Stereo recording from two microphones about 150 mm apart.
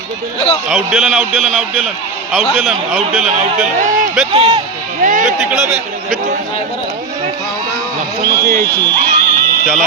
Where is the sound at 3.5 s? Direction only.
60° right (ahead or behind).